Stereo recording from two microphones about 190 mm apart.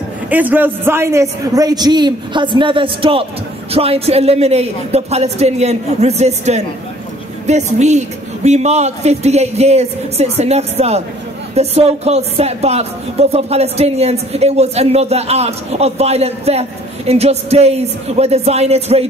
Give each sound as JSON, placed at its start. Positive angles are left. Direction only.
{"t": 0.3, "sound": "a man's voice", "side_deg": -10}